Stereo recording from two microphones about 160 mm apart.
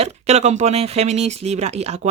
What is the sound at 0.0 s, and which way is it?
Speech, 45° right (ahead or behind).